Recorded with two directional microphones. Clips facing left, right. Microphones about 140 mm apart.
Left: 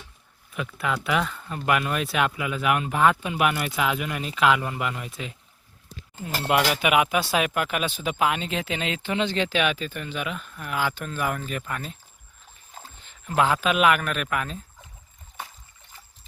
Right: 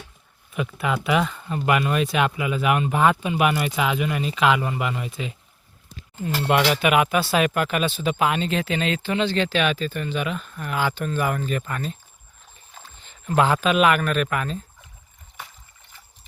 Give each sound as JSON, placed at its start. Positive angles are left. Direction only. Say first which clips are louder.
{"t": 0.5, "sound": "speech", "louder": "right 3 dB", "side_deg": -5}
{"t": 13.0, "sound": "speech", "louder": "right 3 dB", "side_deg": 5}